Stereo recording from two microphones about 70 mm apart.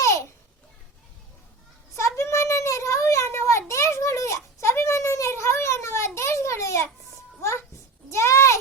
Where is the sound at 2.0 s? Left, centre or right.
Left.